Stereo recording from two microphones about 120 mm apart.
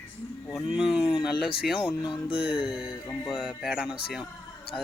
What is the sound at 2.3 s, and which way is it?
Music, 50° left (ahead or behind).